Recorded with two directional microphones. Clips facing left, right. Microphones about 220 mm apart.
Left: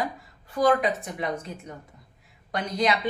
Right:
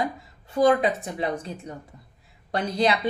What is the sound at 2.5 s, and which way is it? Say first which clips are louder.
Speech: right 2 dB; 30° right (ahead or behind).